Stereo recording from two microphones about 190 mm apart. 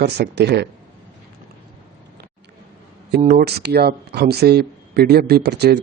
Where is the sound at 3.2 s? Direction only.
50° right (ahead or behind).